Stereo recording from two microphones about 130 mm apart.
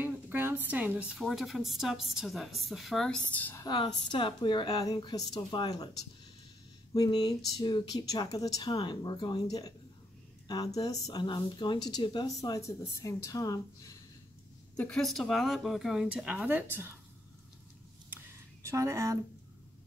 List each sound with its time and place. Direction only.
0.0 s a woman's voice: 15° right (ahead or behind); by 3.5 s 10° left (ahead or behind)
3.5 s a woman's voice: 35° left (ahead or behind)
12.4 s speech: 25° left (ahead or behind)
14.8 s a woman's voice: 5° left (ahead or behind); by 16.9 s 15° right (ahead or behind)
18.1 s a sound: 20° right (ahead or behind)